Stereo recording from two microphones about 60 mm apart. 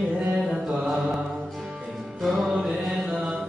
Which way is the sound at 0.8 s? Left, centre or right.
Centre.